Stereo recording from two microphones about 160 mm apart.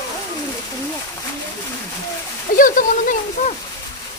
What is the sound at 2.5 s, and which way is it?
Speech, 55° left (ahead or behind).